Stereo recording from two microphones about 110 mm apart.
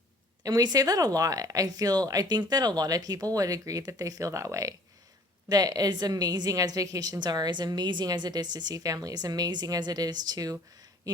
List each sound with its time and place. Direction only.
0.4 s a woman's voice: 35° right (ahead or behind)